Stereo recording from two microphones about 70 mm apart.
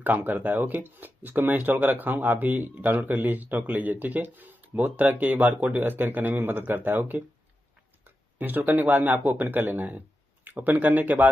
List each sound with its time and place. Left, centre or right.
0.0 s speech: right